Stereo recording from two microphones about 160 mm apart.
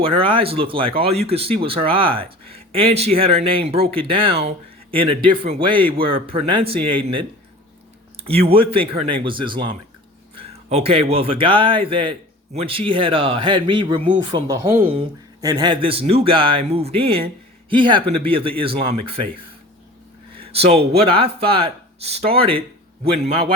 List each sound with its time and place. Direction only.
0.0 s speech: 35° right (ahead or behind)
14.5 s speech: 15° right (ahead or behind); by 19.3 s 35° right (ahead or behind)
20.4 s speech: 40° right (ahead or behind)